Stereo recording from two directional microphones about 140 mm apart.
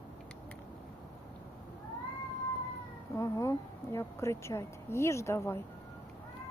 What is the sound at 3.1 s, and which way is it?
Speech, 20° left (ahead or behind).